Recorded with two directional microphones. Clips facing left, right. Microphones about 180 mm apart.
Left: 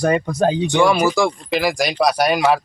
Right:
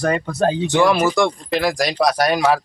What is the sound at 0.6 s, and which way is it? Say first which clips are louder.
Speech: right 1 dB; centre (ahead or behind).